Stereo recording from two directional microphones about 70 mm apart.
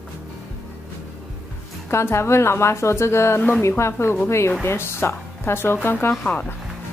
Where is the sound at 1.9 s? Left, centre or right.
Left.